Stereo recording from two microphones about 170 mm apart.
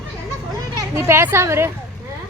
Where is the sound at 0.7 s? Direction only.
15° right (ahead or behind).